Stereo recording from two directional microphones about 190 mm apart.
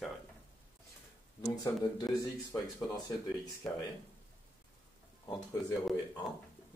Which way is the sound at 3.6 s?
5° left (ahead or behind).